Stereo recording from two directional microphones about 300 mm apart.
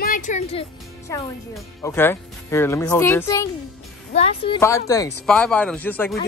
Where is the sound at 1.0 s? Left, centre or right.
Centre.